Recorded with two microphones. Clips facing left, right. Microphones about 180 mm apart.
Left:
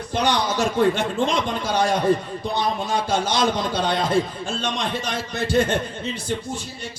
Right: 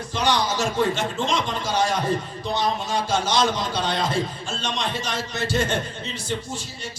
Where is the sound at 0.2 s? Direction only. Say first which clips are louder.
Left 1 dB; 60° left (ahead or behind).